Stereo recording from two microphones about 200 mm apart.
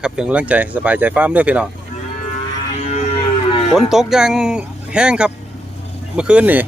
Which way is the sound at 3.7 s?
Centre (ahead or behind).